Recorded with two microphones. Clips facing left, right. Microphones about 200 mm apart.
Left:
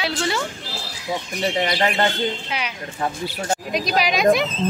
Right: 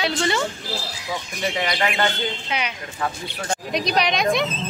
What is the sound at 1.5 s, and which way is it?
Speech, 35° left (ahead or behind).